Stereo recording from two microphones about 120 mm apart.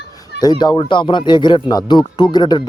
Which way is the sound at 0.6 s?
40° left (ahead or behind).